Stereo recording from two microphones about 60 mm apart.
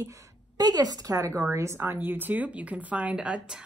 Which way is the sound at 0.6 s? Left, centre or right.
Right.